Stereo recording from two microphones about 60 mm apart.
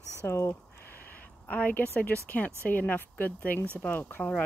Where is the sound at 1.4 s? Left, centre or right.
Left.